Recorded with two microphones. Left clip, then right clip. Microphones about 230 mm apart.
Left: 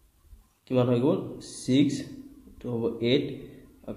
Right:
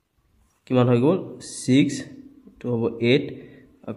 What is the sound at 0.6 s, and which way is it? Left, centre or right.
A man's voice, right.